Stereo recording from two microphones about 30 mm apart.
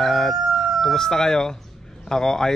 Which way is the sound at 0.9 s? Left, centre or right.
Centre.